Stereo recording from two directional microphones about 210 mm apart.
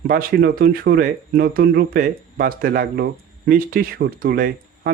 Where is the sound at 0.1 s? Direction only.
45° right (ahead or behind).